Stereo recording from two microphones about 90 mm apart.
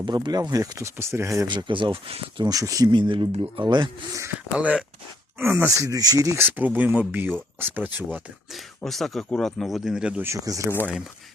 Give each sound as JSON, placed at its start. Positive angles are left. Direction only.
{"t": 0.0, "sound": "speech", "side_deg": -55}
{"t": 1.5, "sound": "speech", "side_deg": -60}
{"t": 2.4, "sound": "speech", "side_deg": -40}
{"t": 2.9, "sound": "speech", "side_deg": -60}
{"t": 4.5, "sound": "speech", "side_deg": -15}
{"t": 5.4, "sound": "speech", "side_deg": -25}
{"t": 6.3, "sound": "speech", "side_deg": -20}
{"t": 8.5, "sound": "speech", "side_deg": 0}
{"t": 10.2, "sound": "speech", "side_deg": -40}